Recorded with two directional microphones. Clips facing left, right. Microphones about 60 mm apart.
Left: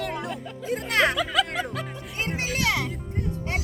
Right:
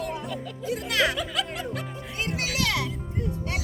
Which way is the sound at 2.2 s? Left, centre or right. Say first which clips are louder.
Left 1 dB; left.